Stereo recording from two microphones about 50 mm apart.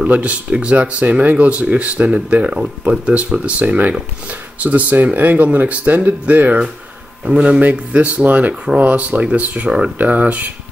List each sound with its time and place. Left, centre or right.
0.0 s speech: right
7.2 s speech: right